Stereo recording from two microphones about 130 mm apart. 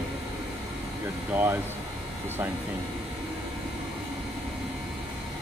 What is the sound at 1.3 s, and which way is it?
Speech, 15° right (ahead or behind).